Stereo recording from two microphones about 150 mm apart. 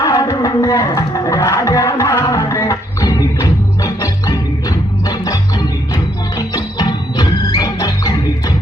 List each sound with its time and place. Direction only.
0.0 s music: 25° left (ahead or behind)
6.5 s music: 30° left (ahead or behind)